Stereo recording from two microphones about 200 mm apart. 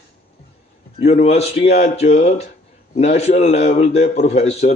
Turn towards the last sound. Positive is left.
turn(degrees=35)  # may be behind; listen again after turning